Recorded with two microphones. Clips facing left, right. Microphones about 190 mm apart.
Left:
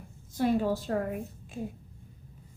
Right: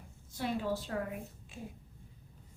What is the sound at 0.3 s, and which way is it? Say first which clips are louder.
A woman's voice: left 8 dB; 45° left (ahead or behind).